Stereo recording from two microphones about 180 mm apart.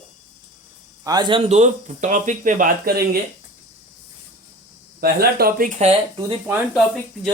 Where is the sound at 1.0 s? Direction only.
20° right (ahead or behind); by 3.0 s 55° right (ahead or behind).